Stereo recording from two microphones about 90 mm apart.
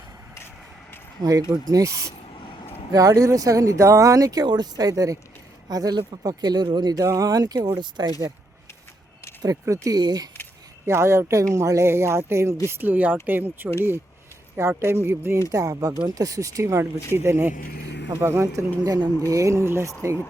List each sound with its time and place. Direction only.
1.2 s speech: 45° right (ahead or behind)
7.0 s speech: 40° right (ahead or behind)
9.4 s speech: 40° right (ahead or behind)
10.0 s speech: 50° right (ahead or behind)
10.8 s speech: 30° right (ahead or behind)
14.8 s speech: 30° right (ahead or behind)
15.5 s speech: 40° right (ahead or behind)
18.8 s speech: 50° right (ahead or behind)
19.3 s speech: 35° right (ahead or behind)